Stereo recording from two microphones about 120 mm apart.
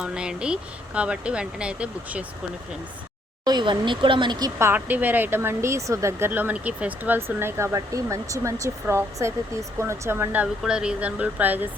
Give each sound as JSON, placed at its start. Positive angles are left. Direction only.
{"t": 0.0, "sound": "speech", "side_deg": -10}
{"t": 3.4, "sound": "speech", "side_deg": -40}
{"t": 4.5, "sound": "speech", "side_deg": -15}
{"t": 10.4, "sound": "speech", "side_deg": -5}